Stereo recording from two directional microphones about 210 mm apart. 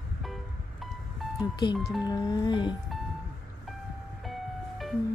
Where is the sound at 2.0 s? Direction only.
20° left (ahead or behind).